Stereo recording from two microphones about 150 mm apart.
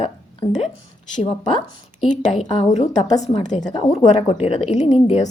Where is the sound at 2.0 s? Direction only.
50° left (ahead or behind).